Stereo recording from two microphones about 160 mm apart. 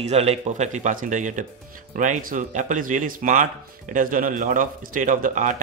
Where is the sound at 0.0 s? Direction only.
40° right (ahead or behind).